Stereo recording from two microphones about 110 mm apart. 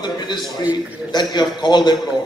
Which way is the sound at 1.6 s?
40° left (ahead or behind).